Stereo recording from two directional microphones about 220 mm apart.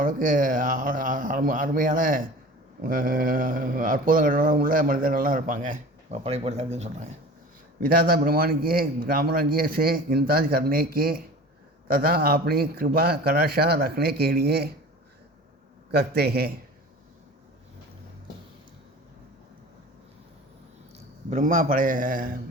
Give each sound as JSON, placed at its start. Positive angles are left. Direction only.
{"t": 0.0, "sound": "mantra", "side_deg": -35}
{"t": 11.9, "sound": "a man's voice", "side_deg": -40}
{"t": 15.9, "sound": "a man's voice", "side_deg": -45}
{"t": 21.2, "sound": "mantra", "side_deg": -35}